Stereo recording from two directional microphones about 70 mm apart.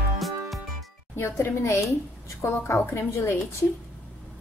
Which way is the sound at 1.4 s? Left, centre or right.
Left.